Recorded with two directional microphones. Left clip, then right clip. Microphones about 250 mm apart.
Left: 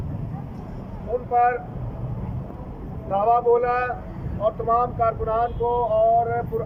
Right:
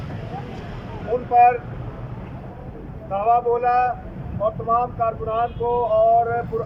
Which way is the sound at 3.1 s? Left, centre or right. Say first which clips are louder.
Even; centre.